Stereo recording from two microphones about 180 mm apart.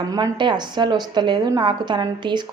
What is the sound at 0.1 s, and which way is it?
A woman's voice, 25° right (ahead or behind).